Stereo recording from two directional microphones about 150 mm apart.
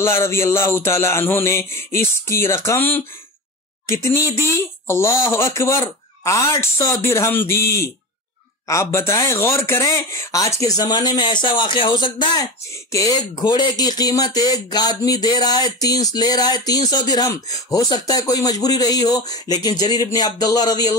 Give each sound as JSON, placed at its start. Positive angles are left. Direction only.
{"t": 0.0, "sound": "music", "side_deg": 20}
{"t": 3.8, "sound": "speech", "side_deg": 20}